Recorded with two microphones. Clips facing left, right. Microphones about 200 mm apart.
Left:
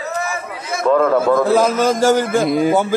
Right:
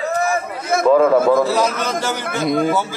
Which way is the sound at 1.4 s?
50° left (ahead or behind).